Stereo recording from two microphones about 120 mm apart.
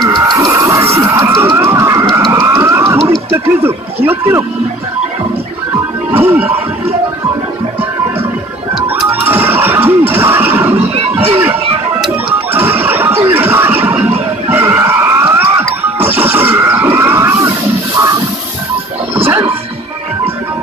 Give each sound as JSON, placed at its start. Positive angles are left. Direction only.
{"t": 0.0, "sound": "a sound", "side_deg": -35}
{"t": 3.3, "sound": "speech", "side_deg": -20}
{"t": 6.1, "sound": "music", "side_deg": -15}
{"t": 9.1, "sound": "music", "side_deg": -15}
{"t": 12.5, "sound": "music", "side_deg": -20}
{"t": 14.5, "sound": "a sound", "side_deg": -20}
{"t": 16.0, "sound": "music", "side_deg": -15}
{"t": 19.2, "sound": "music", "side_deg": -20}